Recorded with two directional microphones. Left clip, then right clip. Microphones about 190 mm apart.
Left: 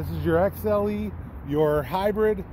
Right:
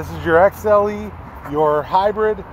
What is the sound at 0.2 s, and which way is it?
Speech, 30° left (ahead or behind).